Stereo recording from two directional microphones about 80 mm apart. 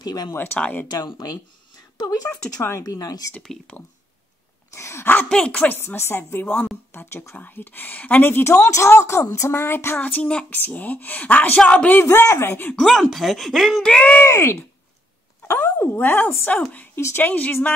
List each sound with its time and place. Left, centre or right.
0.0 s speech: left
0.3 s a woman's voice: left
0.6 s a woman's voice: centre
0.8 s speech: left
2.8 s speech: left
4.7 s a woman's voice: left
5.3 s speech: centre
5.6 s a woman's voice: left
8.6 s a woman's voice: left; by 12.0 s centre
12.0 s a woman's voice: left
12.7 s speech: centre
13.9 s speech: centre
14.2 s a woman's voice: left